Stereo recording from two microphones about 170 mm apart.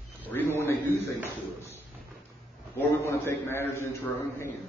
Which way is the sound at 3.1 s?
15° left (ahead or behind).